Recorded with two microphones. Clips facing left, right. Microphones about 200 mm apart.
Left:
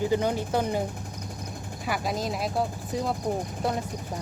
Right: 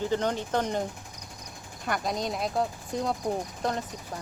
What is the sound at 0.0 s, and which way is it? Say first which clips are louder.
A woman's voice: left 3 dB; 10° left (ahead or behind).